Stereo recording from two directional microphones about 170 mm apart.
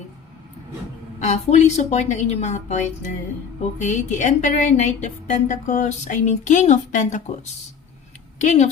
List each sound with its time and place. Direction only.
1.2 s a woman's voice: 40° left (ahead or behind)
8.4 s a woman's voice: 40° left (ahead or behind)